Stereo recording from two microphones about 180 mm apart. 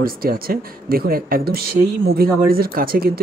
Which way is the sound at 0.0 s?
55° right (ahead or behind).